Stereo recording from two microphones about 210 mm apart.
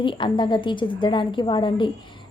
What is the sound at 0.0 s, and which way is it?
A woman's voice, 25° left (ahead or behind).